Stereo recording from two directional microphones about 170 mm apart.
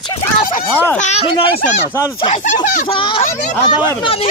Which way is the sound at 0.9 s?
45° left (ahead or behind).